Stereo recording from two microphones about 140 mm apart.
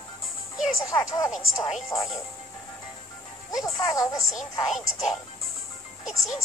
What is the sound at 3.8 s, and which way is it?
Speech, 25° left (ahead or behind).